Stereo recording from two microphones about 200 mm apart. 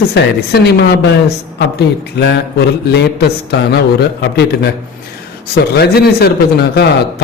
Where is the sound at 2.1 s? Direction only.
55° left (ahead or behind).